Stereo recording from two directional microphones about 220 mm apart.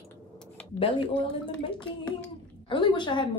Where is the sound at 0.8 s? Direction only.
20° left (ahead or behind).